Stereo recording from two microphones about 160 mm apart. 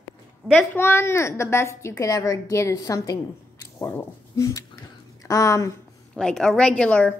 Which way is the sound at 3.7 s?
10° left (ahead or behind).